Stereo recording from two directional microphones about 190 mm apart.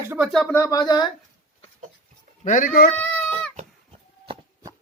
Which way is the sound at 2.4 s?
40° left (ahead or behind).